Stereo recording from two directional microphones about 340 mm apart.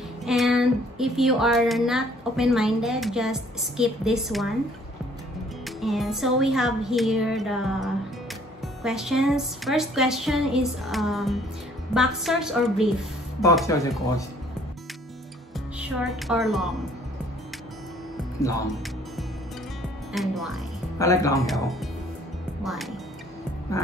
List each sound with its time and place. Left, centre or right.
0.2 s speech: centre
5.8 s speech: centre
16.0 s speech: centre
18.4 s speech: centre
20.1 s speech: centre